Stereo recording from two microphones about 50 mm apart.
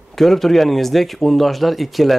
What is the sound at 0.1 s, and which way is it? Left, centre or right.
Speech, centre.